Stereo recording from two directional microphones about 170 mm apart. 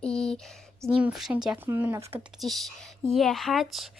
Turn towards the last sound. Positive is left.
turn(degrees=0)  # may be behind; listen again after turning